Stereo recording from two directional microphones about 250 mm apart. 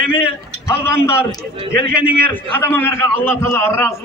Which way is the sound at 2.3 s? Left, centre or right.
Centre.